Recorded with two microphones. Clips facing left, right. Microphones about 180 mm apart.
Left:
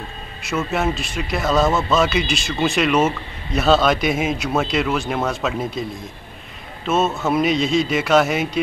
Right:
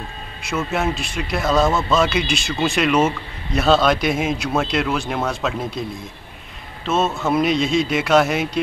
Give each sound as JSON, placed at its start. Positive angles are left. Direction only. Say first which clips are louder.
{"t": 0.5, "sound": "speech", "louder": "left 1 dB", "side_deg": 0}
{"t": 6.9, "sound": "speech", "louder": "even", "side_deg": 5}